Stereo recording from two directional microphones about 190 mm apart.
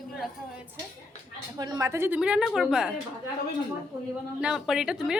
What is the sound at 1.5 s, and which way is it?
A woman's voice, 20° right (ahead or behind).